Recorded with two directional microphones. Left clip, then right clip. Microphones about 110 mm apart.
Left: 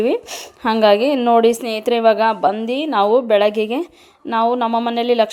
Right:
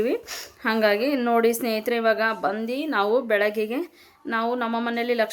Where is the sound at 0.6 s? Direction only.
45° left (ahead or behind).